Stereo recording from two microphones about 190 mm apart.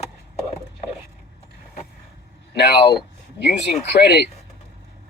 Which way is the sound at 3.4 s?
60° left (ahead or behind).